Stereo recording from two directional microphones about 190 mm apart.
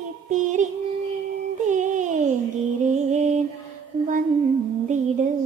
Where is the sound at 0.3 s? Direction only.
40° right (ahead or behind).